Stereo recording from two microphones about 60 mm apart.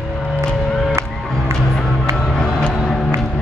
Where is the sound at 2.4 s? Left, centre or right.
Centre.